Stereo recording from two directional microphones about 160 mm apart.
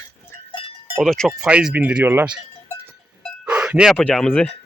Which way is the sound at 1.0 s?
Centre (ahead or behind).